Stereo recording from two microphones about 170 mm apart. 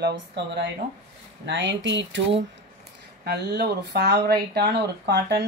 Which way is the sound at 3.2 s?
75° right (ahead or behind).